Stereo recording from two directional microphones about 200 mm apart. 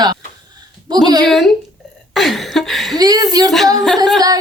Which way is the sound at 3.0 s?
20° right (ahead or behind).